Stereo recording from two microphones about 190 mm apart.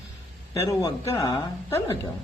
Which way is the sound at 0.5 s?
15° left (ahead or behind).